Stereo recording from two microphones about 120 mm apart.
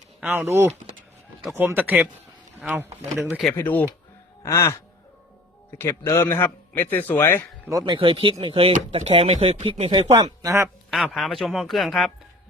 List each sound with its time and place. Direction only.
0.2 s speech: 5° right (ahead or behind)
0.4 s speech: 25° right (ahead or behind)
3.2 s speech: centre (ahead or behind)
3.6 s a man's voice: 15° left (ahead or behind)
4.4 s sigh: 25° left (ahead or behind)
5.7 s a man's voice: 20° left (ahead or behind)
7.7 s speech: 30° right (ahead or behind)
7.9 s speech: 50° right (ahead or behind)
8.9 s speech: 60° right (ahead or behind)
10.4 s speech: 25° right (ahead or behind)
10.9 s speech: centre (ahead or behind)